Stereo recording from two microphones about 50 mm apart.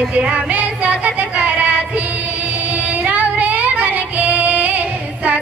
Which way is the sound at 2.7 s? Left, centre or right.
Right.